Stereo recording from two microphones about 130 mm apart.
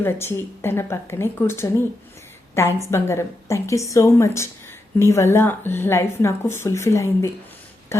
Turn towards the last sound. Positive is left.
turn(degrees=20)  # may be behind; listen again after turning